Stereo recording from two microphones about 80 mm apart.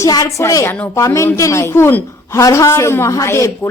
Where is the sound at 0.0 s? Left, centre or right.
Left.